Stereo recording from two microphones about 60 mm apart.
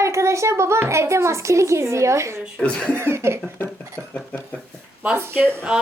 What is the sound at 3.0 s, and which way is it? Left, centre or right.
Cough, right.